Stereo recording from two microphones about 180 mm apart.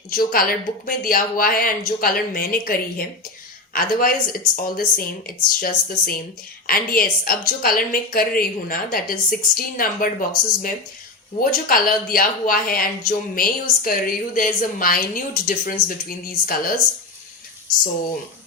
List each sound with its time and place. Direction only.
0.1 s speech: 55° left (ahead or behind)